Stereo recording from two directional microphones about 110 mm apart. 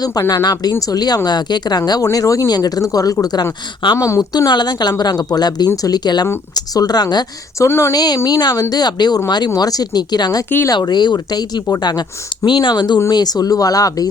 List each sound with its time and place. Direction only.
0.0 s speech: 35° left (ahead or behind)
4.2 s speech: 40° left (ahead or behind)
7.7 s speech: 25° left (ahead or behind)
7.9 s speech: 40° left (ahead or behind)